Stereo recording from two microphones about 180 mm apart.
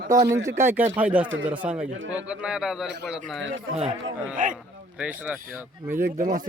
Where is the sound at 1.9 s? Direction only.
90° right.